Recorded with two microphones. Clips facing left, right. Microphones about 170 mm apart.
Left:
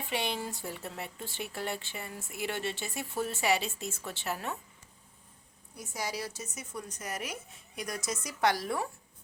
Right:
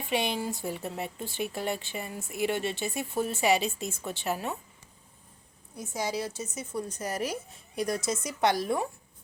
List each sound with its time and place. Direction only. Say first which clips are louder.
0.1 s speech: right 5 dB; 15° right (ahead or behind)
5.7 s a woman's voice: right 5 dB; 25° right (ahead or behind)